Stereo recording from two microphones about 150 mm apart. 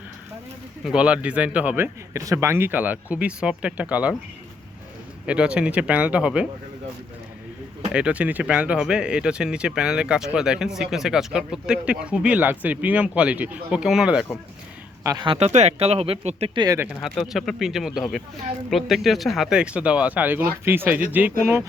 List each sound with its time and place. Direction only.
0.9 s a man's voice: 5° right (ahead or behind)
5.2 s a man's voice: 5° right (ahead or behind)
7.9 s a man's voice: 10° right (ahead or behind)
15.0 s speech: 30° right (ahead or behind)
16.6 s speech: 25° right (ahead or behind)
17.0 s a man's voice: centre (ahead or behind)